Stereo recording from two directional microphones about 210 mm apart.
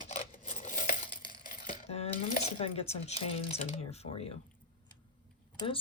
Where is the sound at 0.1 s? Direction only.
35° left (ahead or behind).